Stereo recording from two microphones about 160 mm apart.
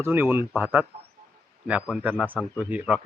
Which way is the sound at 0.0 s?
15° right (ahead or behind).